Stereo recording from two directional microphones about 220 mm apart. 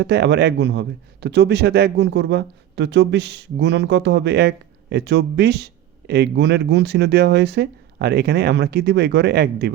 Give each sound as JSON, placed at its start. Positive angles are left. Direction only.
{"t": 0.0, "sound": "speech", "side_deg": -50}